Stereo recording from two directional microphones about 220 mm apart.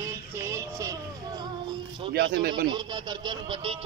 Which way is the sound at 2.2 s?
50° right (ahead or behind).